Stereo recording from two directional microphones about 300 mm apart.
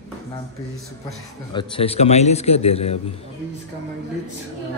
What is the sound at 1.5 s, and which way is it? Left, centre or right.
A man's voice, centre.